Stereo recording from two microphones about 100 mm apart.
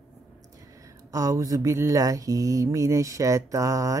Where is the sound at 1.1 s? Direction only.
35° right (ahead or behind).